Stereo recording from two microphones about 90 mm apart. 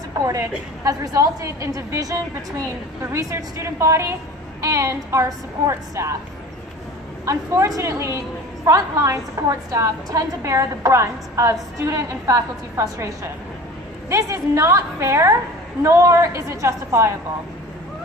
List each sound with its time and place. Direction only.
0.2 s a woman's voice: 40° right (ahead or behind)
7.2 s a woman's voice: 35° right (ahead or behind)